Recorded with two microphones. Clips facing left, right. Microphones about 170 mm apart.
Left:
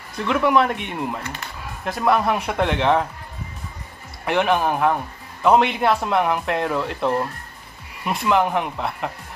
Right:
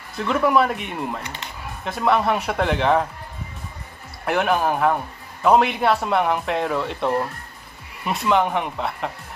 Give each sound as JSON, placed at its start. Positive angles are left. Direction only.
{"t": 0.2, "sound": "speech", "side_deg": 0}
{"t": 1.2, "sound": "speech", "side_deg": -20}
{"t": 1.9, "sound": "speech", "side_deg": 0}
{"t": 4.3, "sound": "speech", "side_deg": 0}